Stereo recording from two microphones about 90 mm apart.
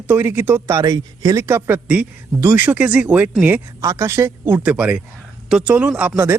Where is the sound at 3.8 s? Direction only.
30° right (ahead or behind); by 5.8 s 15° right (ahead or behind).